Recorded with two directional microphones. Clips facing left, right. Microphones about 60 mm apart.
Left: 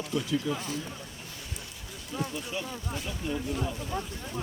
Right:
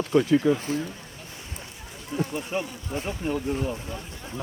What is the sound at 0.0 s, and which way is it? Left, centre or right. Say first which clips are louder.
Speech: right 10 dB; right.